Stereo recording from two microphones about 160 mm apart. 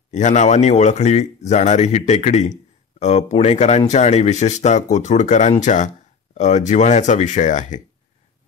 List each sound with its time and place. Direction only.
0.1 s speech: 50° left (ahead or behind)